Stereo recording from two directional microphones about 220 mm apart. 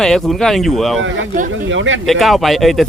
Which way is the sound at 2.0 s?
Centre (ahead or behind).